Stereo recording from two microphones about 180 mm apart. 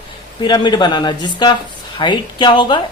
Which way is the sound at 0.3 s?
25° left (ahead or behind).